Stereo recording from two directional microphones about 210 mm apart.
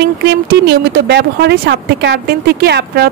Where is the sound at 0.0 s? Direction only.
50° right (ahead or behind).